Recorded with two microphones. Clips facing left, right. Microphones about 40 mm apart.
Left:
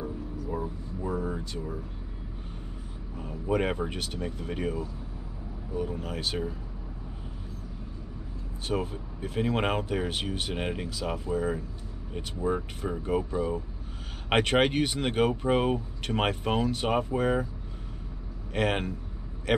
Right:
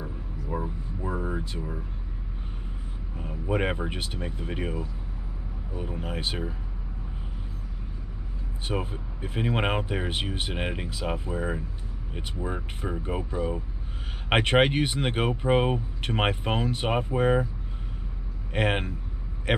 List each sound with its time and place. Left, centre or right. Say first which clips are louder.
0.0 s vehicle: left 3 dB; centre
3.2 s speech: even; centre
8.6 s speech: left 1 dB; right
18.5 s speech: right 1 dB; centre